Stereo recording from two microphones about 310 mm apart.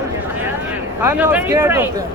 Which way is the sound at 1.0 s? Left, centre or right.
Centre.